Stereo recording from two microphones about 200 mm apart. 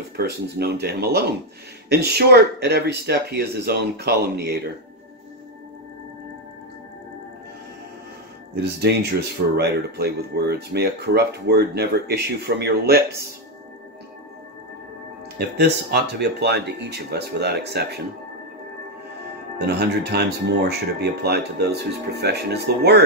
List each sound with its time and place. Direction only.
0.2 s speech: 55° right (ahead or behind)
9.6 s speech: 55° right (ahead or behind)
15.3 s speech: 55° right (ahead or behind)
19.6 s speech: 55° right (ahead or behind)